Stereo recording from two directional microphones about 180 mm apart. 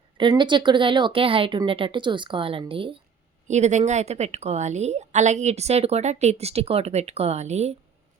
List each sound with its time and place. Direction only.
0.2 s speech: 25° right (ahead or behind)
3.5 s a woman's voice: 40° right (ahead or behind)